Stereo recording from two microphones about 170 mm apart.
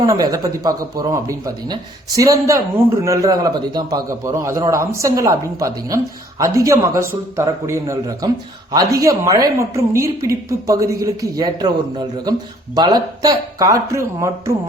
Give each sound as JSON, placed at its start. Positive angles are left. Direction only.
{"t": 0.0, "sound": "a man's voice", "side_deg": -20}